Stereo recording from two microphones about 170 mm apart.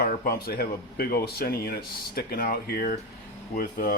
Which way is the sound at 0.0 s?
65° left (ahead or behind).